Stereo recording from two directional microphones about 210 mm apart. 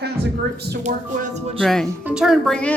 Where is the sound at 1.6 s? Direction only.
Centre (ahead or behind).